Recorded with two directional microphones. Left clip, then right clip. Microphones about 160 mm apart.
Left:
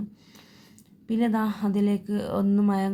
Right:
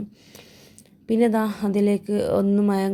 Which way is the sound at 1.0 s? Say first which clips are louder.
Right 6 dB; 30° right (ahead or behind).